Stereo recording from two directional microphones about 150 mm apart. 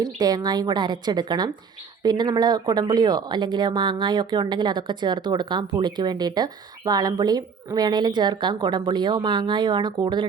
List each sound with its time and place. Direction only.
0.2 s speech: 25° right (ahead or behind)